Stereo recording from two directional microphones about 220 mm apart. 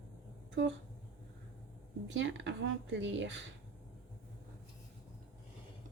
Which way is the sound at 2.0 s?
55° right (ahead or behind).